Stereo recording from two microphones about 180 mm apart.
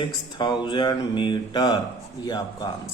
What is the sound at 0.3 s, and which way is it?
Speech, 25° left (ahead or behind).